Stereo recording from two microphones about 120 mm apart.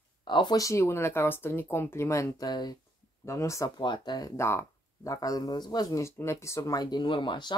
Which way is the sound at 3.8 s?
40° left (ahead or behind).